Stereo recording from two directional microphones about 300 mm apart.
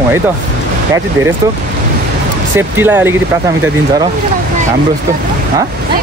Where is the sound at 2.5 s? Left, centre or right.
Centre.